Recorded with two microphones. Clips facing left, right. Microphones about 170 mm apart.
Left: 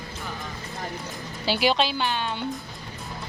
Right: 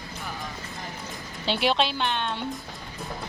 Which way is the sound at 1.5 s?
Centre (ahead or behind).